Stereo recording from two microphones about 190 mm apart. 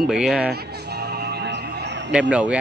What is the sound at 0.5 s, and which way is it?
Music, 60° right (ahead or behind).